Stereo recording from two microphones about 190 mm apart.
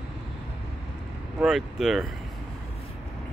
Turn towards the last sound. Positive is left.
turn(degrees=0)  # may be behind; listen again after turning